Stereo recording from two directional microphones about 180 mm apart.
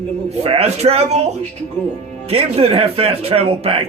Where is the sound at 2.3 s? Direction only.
35° right (ahead or behind).